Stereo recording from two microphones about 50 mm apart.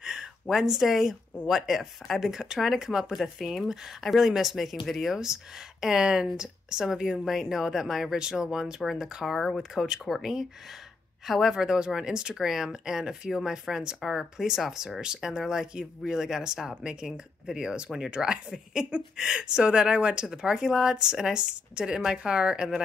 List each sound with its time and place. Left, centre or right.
0.0 s a sound: centre
1.5 s speech: centre
9.2 s speech: centre